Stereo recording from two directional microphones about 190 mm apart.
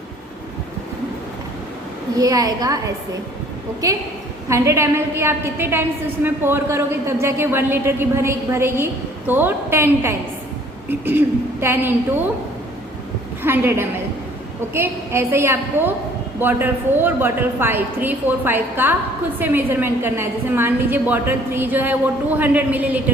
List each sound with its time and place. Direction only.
2.1 s a woman's voice: 20° right (ahead or behind)
4.4 s a woman's voice: 15° right (ahead or behind)
13.4 s a woman's voice: 10° right (ahead or behind)